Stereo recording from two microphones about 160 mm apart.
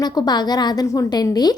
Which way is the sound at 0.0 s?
25° left (ahead or behind).